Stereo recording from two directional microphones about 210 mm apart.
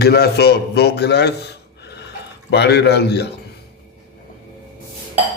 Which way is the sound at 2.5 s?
50° left (ahead or behind).